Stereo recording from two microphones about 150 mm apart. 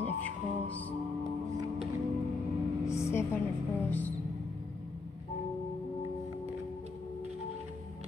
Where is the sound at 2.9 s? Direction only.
15° left (ahead or behind).